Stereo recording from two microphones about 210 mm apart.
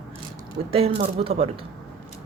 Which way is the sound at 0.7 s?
30° right (ahead or behind).